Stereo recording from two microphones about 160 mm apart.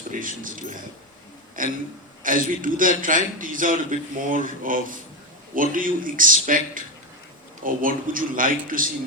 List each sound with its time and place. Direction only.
0.1 s a man's voice: 55° right (ahead or behind)